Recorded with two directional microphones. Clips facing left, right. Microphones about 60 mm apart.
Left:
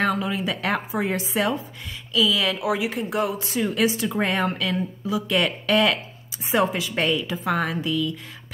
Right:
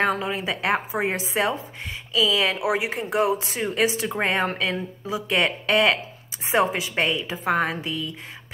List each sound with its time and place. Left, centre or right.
0.0 s a woman's voice: right